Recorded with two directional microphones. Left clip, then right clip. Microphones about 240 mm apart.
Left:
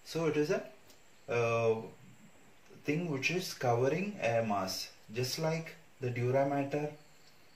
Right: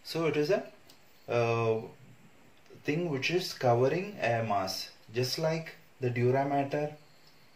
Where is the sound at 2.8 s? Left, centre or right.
Right.